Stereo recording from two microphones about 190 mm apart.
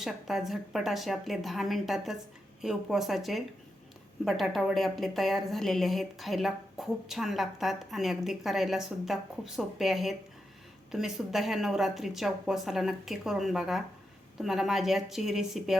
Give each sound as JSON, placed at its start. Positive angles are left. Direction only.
{"t": 0.0, "sound": "speech", "side_deg": 0}